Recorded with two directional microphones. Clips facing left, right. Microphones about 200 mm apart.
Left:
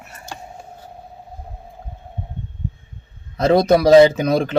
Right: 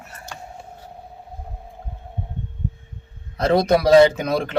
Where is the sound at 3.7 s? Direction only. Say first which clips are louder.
Left 3 dB; 20° left (ahead or behind).